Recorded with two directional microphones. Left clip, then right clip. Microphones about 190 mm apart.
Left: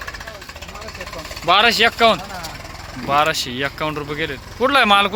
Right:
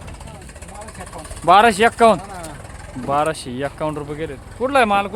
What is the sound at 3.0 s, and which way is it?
Speech, 20° right (ahead or behind).